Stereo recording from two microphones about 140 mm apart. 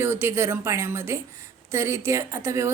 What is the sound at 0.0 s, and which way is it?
A woman's voice, 15° right (ahead or behind).